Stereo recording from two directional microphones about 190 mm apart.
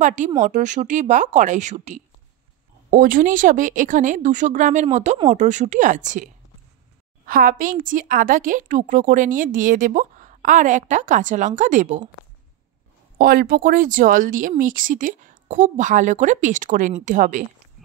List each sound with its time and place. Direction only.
0.0 s a woman's voice: 40° right (ahead or behind)
13.2 s a woman's voice: 50° right (ahead or behind)